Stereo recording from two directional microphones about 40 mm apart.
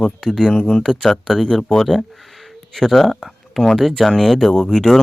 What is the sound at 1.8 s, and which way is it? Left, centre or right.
Speech, centre.